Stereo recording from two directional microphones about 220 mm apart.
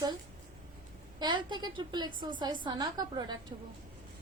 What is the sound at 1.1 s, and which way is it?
A woman's voice, 20° right (ahead or behind).